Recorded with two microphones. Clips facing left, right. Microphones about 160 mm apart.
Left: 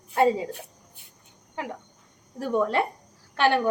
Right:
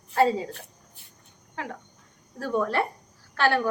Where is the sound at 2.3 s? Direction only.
20° left (ahead or behind).